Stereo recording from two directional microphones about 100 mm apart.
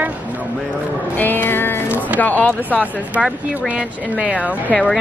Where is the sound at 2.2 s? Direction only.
15° left (ahead or behind).